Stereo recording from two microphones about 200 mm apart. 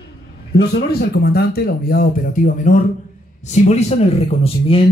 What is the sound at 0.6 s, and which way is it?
A man's voice, 55° left (ahead or behind).